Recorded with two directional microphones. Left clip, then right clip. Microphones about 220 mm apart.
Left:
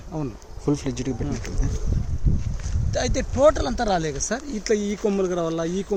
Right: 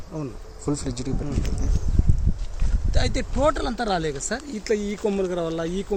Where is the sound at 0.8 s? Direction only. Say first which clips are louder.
Left 2 dB; 15° right (ahead or behind).